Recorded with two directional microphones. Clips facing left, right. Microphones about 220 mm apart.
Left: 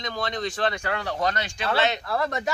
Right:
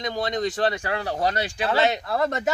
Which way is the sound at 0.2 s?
35° right (ahead or behind).